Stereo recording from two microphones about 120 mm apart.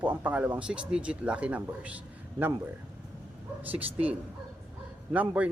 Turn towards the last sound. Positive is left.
turn(degrees=-10)  # may be behind; listen again after turning